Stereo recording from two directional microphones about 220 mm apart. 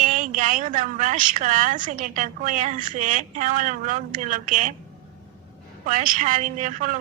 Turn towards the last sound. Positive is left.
turn(degrees=-35)  # may be behind; listen again after turning